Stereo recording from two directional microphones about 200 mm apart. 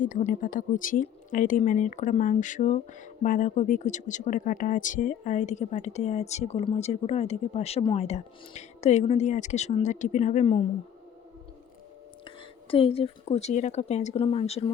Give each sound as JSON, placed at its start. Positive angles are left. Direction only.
{"t": 0.0, "sound": "speech", "side_deg": 40}
{"t": 12.7, "sound": "speech", "side_deg": 30}